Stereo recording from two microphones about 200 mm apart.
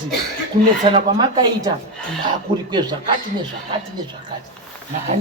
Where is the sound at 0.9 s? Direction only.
20° right (ahead or behind).